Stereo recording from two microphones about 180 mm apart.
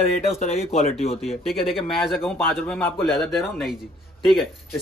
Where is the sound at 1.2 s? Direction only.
Centre (ahead or behind).